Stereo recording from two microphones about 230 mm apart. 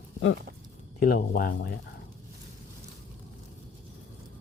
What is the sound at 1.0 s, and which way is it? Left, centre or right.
Speech, left.